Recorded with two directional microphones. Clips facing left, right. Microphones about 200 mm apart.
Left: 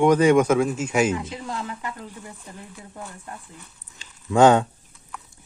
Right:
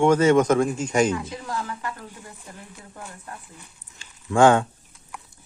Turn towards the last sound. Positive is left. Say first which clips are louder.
# left 1 dB
turn(degrees=20)  # may be behind; listen again after turning